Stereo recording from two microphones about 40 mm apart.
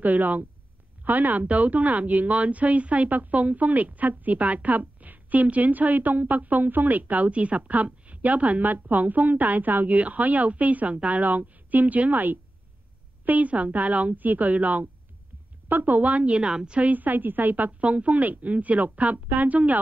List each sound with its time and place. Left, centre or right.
0.0 s a woman's voice: right
16.8 s speech: right